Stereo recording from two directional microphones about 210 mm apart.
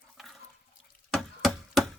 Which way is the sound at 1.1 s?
Centre (ahead or behind).